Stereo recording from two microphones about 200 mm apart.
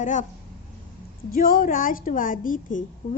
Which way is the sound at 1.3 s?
45° left (ahead or behind).